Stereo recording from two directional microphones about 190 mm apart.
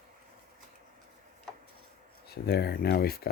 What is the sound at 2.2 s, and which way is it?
Speech, 55° left (ahead or behind).